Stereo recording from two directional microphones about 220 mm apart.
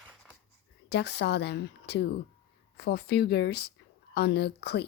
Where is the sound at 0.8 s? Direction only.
50° left (ahead or behind).